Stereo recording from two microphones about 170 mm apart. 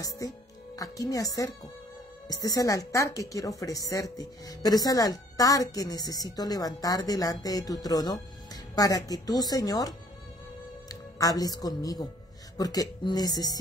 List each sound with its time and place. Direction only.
0.2 s speech: 20° left (ahead or behind)